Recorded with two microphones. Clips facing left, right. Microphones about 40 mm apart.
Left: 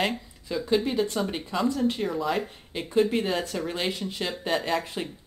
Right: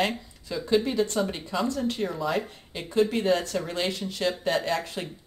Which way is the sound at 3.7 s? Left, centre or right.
Centre.